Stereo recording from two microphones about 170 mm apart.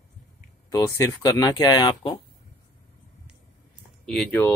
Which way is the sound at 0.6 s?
20° left (ahead or behind).